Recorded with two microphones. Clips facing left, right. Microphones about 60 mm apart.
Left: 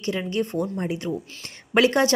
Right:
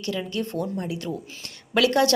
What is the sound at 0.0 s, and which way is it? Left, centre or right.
A woman's voice, left.